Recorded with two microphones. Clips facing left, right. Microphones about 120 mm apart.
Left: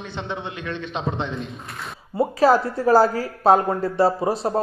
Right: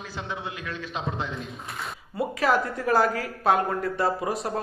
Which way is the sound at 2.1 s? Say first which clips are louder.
Left 7 dB; 30° left (ahead or behind).